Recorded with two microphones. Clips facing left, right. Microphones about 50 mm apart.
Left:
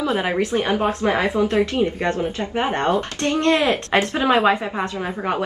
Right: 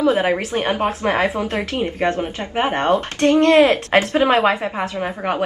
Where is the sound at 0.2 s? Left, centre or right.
Right.